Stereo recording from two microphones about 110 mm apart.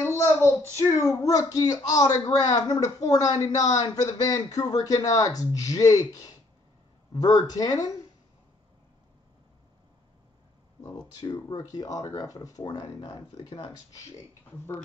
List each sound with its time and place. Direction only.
0.0 s a sound: 20° left (ahead or behind)
0.9 s speech: 30° left (ahead or behind)
11.1 s speech: 35° left (ahead or behind)